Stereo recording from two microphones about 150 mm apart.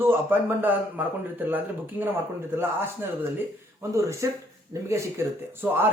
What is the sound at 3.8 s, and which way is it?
Speech, 20° right (ahead or behind).